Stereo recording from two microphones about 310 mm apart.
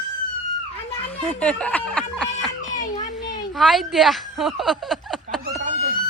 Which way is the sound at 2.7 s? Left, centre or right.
Left.